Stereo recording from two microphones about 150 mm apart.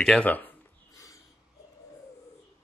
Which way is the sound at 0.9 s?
20° left (ahead or behind).